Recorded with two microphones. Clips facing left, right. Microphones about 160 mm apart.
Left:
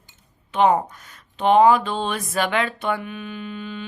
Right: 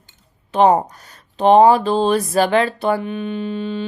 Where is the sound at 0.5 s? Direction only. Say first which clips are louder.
Right 4 dB; 35° right (ahead or behind).